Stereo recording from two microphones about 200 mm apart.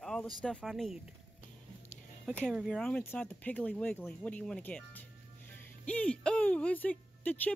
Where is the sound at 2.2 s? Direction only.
Centre (ahead or behind).